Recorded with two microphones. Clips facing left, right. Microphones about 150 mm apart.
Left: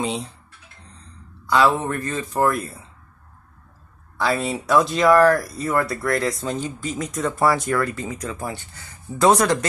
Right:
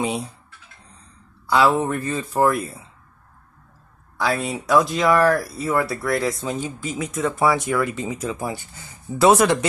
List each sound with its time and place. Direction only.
0.0 s speech: 10° right (ahead or behind)
1.5 s speech: 10° right (ahead or behind)
4.2 s speech: centre (ahead or behind)
7.8 s speech: 20° right (ahead or behind)
9.1 s speech: 5° right (ahead or behind)